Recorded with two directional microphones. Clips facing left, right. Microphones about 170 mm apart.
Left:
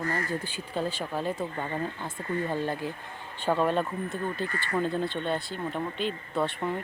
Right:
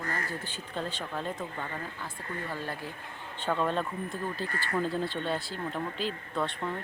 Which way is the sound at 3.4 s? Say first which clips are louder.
Left 4 dB; 5° left (ahead or behind).